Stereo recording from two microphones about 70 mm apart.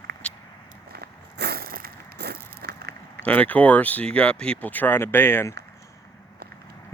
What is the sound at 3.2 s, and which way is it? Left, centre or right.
Speech, left.